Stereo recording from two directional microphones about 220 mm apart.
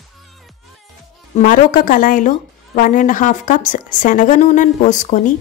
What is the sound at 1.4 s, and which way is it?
A woman's voice, 35° left (ahead or behind).